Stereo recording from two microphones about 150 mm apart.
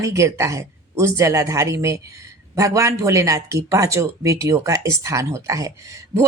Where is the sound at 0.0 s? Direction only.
20° right (ahead or behind).